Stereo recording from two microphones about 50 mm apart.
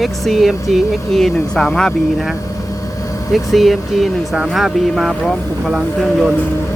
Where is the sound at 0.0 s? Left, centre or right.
Centre.